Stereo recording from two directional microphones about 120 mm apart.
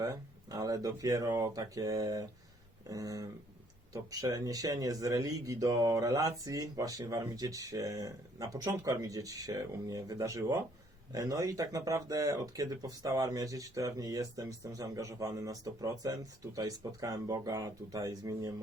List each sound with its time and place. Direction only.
0.0 s speech: 30° right (ahead or behind)